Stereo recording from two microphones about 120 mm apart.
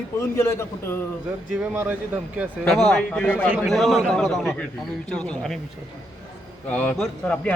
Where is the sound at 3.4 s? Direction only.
10° right (ahead or behind).